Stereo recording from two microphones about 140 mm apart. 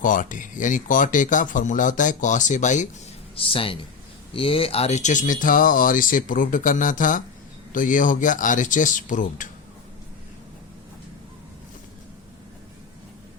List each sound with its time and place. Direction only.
0.0 s a man's voice: 70° left (ahead or behind)
3.3 s a man's voice: 40° left (ahead or behind); by 9.5 s 65° left (ahead or behind)